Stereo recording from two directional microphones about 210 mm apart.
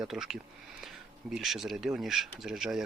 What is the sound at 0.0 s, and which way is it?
Speech, centre (ahead or behind).